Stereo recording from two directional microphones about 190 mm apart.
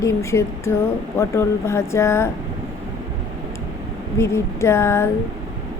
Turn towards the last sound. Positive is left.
turn(degrees=15)  # may be behind; listen again after turning